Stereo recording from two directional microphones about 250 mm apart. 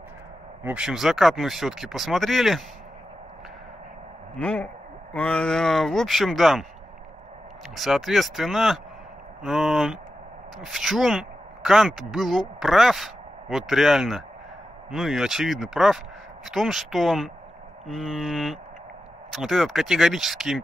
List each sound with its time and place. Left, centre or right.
0.7 s speech: centre
4.4 s speech: centre
7.7 s speech: centre